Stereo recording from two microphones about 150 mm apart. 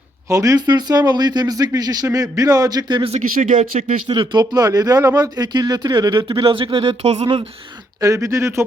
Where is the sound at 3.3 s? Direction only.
60° right (ahead or behind).